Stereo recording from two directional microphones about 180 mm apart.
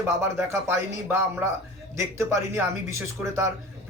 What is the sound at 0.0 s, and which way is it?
A man's voice, 15° right (ahead or behind).